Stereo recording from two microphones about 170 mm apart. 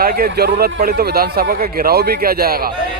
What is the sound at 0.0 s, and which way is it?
Speech, 60° right (ahead or behind).